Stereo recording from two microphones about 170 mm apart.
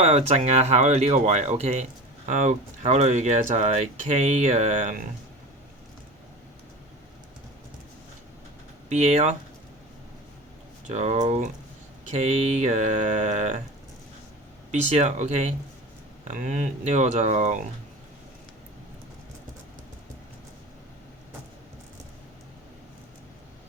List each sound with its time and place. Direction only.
0.0 s speech: 40° right (ahead or behind)
8.9 s speech: 45° right (ahead or behind)
10.8 s speech: 40° right (ahead or behind)
14.7 s speech: 40° right (ahead or behind)